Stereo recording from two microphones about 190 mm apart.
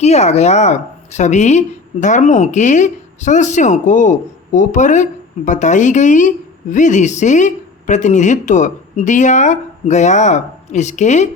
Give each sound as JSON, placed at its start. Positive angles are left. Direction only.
{"t": 0.0, "sound": "a woman's voice", "side_deg": 35}